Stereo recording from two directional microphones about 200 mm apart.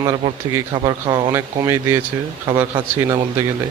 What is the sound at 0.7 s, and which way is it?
Speech, 20° right (ahead or behind).